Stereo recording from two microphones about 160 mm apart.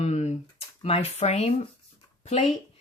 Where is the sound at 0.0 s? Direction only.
45° left (ahead or behind).